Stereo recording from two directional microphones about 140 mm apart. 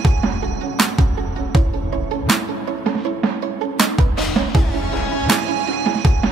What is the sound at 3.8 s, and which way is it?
Music, centre (ahead or behind).